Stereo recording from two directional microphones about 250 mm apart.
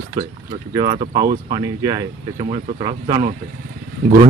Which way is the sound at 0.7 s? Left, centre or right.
Centre.